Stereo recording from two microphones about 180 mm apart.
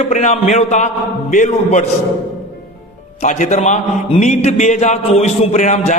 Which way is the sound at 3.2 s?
40° left (ahead or behind).